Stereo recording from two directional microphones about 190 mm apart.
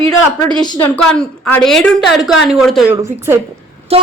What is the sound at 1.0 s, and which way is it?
A woman's voice, 5° left (ahead or behind).